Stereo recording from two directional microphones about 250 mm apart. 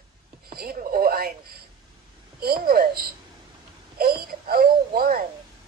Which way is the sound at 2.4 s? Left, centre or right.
Right.